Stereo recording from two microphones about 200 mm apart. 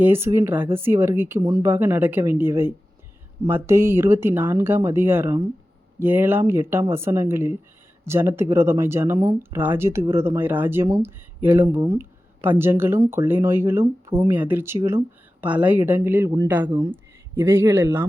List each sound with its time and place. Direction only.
0.0 s speech: 10° right (ahead or behind)
16.6 s speech: 25° right (ahead or behind)
17.3 s speech: 10° right (ahead or behind)